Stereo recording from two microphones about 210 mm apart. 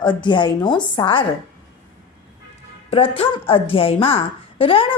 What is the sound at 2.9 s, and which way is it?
A woman's voice, 25° left (ahead or behind).